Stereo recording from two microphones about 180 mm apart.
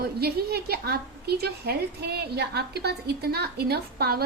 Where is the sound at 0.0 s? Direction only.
60° right (ahead or behind).